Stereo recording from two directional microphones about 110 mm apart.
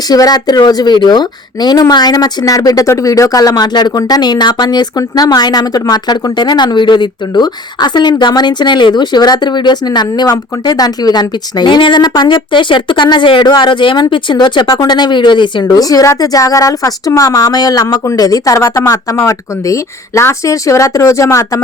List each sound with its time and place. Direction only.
0.1 s a woman's voice: 35° left (ahead or behind)